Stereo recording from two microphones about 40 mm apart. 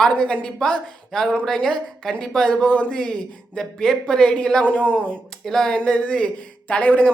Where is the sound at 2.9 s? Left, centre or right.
Centre.